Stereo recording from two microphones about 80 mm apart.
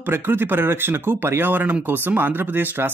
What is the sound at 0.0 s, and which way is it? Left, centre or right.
Speech, right.